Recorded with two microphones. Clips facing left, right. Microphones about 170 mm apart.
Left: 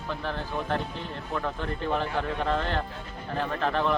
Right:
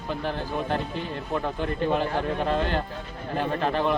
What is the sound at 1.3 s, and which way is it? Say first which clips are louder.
Speech: right 4 dB; 15° right (ahead or behind).